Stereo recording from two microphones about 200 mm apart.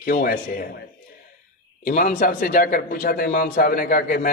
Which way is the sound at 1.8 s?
40° left (ahead or behind).